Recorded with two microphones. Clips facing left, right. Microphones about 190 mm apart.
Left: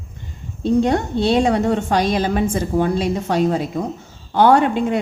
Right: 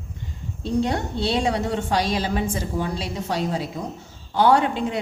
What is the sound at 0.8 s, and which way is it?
A woman's voice, 50° left (ahead or behind).